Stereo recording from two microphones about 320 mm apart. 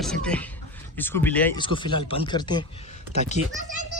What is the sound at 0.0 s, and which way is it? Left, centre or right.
Speech, centre.